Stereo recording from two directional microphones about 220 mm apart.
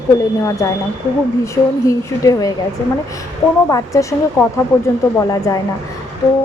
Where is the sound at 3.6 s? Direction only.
15° left (ahead or behind).